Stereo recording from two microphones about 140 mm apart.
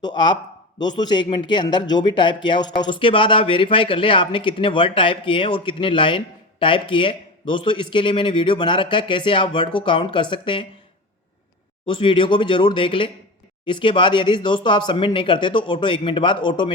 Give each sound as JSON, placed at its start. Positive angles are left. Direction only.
{"t": 0.0, "sound": "speech", "side_deg": 30}
{"t": 11.9, "sound": "speech", "side_deg": 35}